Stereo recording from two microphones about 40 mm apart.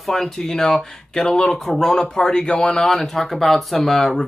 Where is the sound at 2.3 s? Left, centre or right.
Left.